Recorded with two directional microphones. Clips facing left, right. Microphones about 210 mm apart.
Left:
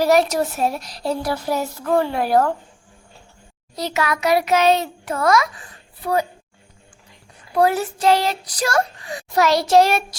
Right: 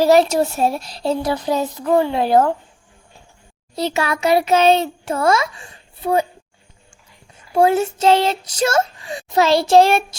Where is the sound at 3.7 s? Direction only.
30° right (ahead or behind).